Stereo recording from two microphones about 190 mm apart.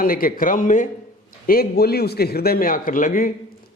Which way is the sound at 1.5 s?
55° left (ahead or behind).